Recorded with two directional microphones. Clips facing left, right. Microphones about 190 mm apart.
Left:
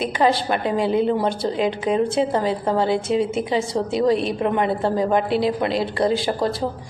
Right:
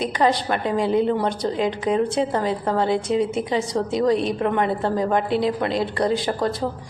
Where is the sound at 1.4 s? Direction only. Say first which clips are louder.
Left 1 dB; 25° left (ahead or behind).